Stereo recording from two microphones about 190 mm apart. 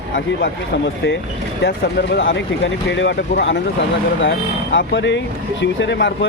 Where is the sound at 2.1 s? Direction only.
65° left (ahead or behind).